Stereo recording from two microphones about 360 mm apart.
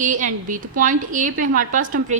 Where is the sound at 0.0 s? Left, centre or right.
Right.